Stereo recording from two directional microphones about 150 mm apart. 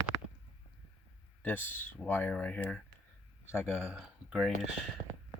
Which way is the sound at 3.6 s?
Centre (ahead or behind).